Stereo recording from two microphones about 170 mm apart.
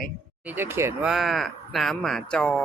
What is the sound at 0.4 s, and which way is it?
Speech, 15° right (ahead or behind).